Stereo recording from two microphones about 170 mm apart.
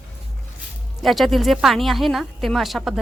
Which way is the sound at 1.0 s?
Centre (ahead or behind).